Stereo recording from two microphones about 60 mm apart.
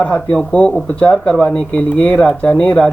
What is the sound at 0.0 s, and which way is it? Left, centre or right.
Speech, centre.